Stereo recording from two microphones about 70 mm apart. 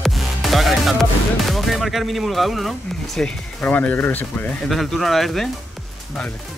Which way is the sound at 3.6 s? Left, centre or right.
Left.